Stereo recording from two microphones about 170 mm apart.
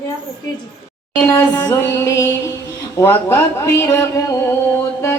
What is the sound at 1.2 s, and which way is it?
Speech, 15° left (ahead or behind).